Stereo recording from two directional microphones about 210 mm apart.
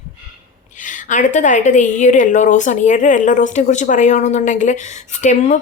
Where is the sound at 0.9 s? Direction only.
35° left (ahead or behind).